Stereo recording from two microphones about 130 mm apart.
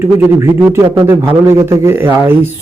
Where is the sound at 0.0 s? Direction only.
15° right (ahead or behind).